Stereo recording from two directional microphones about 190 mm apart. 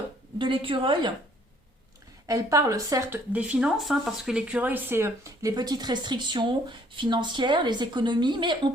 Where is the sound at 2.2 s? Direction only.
15° right (ahead or behind).